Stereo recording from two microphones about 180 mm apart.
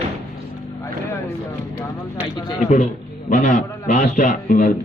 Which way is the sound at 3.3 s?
45° left (ahead or behind).